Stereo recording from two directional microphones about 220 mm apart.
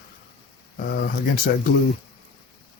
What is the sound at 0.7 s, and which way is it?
Speech, 45° left (ahead or behind).